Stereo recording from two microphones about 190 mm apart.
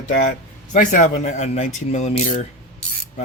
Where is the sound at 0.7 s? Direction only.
40° left (ahead or behind).